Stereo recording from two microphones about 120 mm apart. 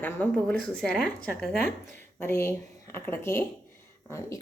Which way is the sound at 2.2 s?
20° left (ahead or behind).